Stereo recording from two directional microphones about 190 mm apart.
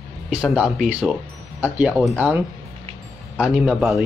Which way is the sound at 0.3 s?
5° right (ahead or behind).